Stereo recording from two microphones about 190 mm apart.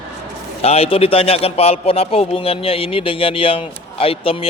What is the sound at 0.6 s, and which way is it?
A man's voice, 30° left (ahead or behind).